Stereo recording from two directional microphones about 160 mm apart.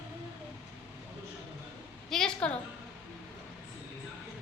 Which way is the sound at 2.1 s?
5° left (ahead or behind).